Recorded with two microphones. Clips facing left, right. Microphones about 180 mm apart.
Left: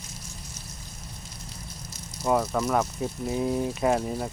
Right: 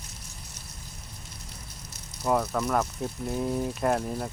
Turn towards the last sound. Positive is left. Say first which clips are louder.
# left 2 dB
turn(degrees=5)  # may be behind; listen again after turning